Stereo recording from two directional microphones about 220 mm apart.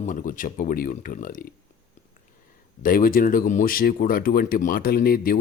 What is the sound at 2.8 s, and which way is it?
Speech, 40° left (ahead or behind).